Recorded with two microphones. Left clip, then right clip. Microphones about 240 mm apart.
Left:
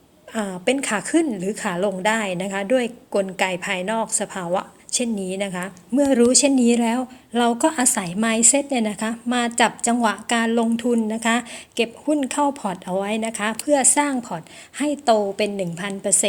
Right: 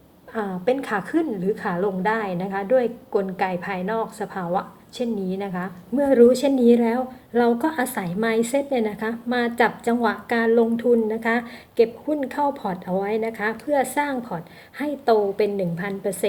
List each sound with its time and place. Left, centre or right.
0.3 s a woman's voice: left